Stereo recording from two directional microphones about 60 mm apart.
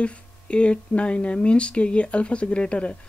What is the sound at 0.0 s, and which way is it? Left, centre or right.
Speech, centre.